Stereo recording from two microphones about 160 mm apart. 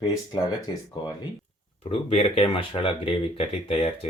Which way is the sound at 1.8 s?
40° left (ahead or behind).